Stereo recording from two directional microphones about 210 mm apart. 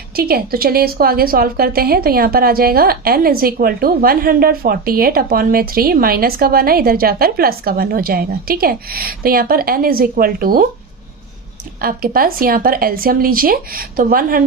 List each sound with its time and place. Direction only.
0.2 s a woman's voice: 45° right (ahead or behind)
11.8 s a woman's voice: 45° right (ahead or behind)